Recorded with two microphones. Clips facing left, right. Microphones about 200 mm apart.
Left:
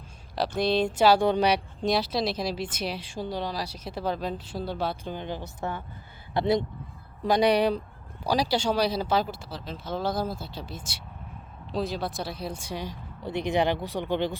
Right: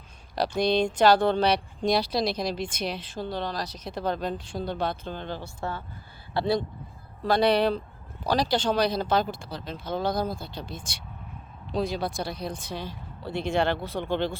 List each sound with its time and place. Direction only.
0.3 s speech: 5° left (ahead or behind)